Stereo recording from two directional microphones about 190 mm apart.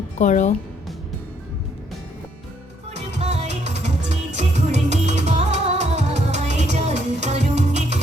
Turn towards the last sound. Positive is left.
turn(degrees=-35)  # may be behind; listen again after turning